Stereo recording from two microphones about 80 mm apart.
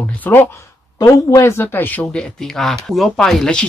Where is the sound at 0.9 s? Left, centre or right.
Left.